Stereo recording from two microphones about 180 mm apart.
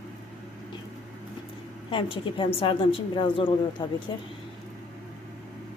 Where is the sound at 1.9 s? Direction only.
30° left (ahead or behind).